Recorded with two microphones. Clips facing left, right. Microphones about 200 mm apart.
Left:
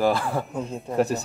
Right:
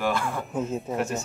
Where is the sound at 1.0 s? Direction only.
35° left (ahead or behind).